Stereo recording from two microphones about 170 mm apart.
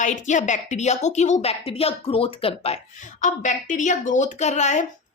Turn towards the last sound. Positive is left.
turn(degrees=45)  # may be behind; listen again after turning